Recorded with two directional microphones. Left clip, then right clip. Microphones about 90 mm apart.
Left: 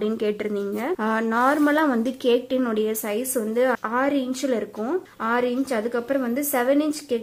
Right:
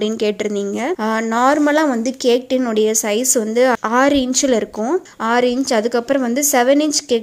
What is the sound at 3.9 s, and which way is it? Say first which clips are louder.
Speech: right 9 dB; 70° right (ahead or behind).